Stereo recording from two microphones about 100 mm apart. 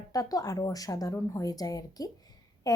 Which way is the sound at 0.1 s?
35° left (ahead or behind).